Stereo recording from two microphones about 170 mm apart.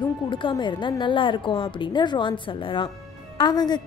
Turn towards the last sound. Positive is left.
turn(degrees=25)  # may be behind; listen again after turning